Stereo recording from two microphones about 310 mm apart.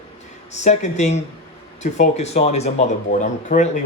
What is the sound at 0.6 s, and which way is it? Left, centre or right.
Speech, left.